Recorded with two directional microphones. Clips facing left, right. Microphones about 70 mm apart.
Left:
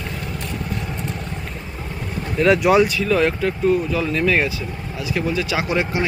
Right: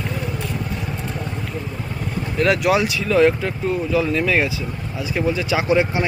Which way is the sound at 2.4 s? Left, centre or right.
Centre.